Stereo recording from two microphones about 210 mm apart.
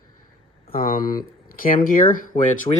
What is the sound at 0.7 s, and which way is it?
Speech, 45° left (ahead or behind).